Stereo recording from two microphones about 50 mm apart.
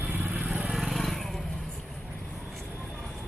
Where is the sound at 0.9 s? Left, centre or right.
Centre.